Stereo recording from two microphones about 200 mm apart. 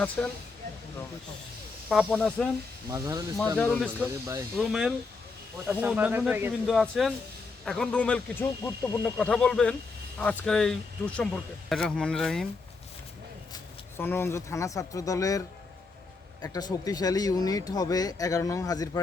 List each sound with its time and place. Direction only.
0.2 s speech: 5° left (ahead or behind)
1.9 s speech: centre (ahead or behind)
2.9 s speech: 15° right (ahead or behind)
4.5 s speech: centre (ahead or behind)
6.7 s speech: centre (ahead or behind)
13.5 s speech: 10° left (ahead or behind)